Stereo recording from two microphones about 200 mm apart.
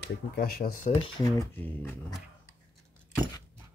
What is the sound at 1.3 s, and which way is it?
Speech, 15° left (ahead or behind).